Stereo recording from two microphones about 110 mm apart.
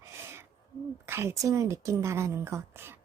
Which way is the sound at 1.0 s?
25° right (ahead or behind).